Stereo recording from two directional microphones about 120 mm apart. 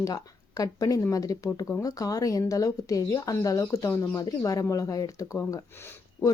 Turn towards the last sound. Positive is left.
turn(degrees=5)  # may be behind; listen again after turning